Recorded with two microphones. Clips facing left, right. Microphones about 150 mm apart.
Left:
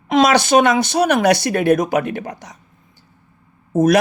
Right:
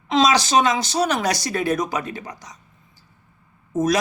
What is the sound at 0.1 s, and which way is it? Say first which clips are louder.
Speech: left 4 dB; 60° left (ahead or behind).